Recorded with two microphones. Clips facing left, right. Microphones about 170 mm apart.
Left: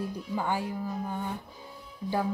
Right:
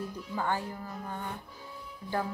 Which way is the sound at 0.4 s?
10° left (ahead or behind).